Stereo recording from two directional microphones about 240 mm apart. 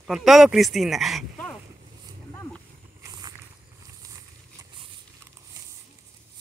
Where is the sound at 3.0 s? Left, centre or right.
Centre.